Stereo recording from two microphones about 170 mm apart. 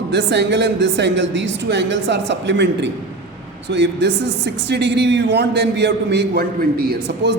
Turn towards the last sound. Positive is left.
turn(degrees=-65)  # may be behind; listen again after turning